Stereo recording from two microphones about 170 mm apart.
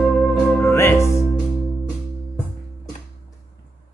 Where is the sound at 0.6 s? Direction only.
15° left (ahead or behind).